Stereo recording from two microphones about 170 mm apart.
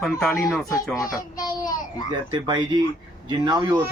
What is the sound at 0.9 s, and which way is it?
Speech, 20° left (ahead or behind).